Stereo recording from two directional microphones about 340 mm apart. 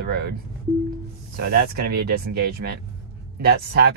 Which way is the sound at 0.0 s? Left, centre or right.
Right.